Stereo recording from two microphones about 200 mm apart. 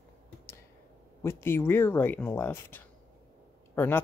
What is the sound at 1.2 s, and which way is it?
A man's voice, 15° left (ahead or behind).